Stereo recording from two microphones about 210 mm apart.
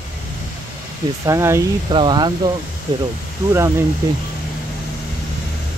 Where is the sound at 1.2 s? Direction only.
15° right (ahead or behind).